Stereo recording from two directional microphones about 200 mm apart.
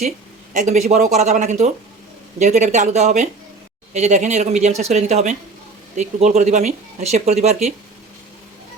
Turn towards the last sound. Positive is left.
turn(degrees=-35)  # may be behind; listen again after turning